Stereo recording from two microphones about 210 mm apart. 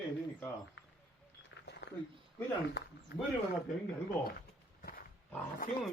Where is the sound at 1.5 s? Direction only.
55° left (ahead or behind).